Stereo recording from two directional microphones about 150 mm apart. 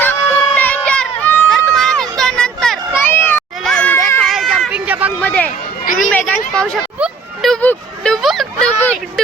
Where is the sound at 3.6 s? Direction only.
5° left (ahead or behind).